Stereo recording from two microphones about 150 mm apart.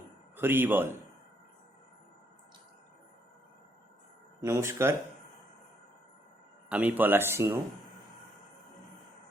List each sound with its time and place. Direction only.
0.3 s speech: 15° right (ahead or behind)
4.4 s speech: 20° right (ahead or behind)
6.7 s speech: 10° right (ahead or behind)